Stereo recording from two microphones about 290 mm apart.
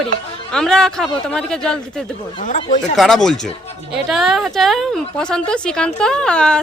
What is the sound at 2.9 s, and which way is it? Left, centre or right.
A woman's voice, centre.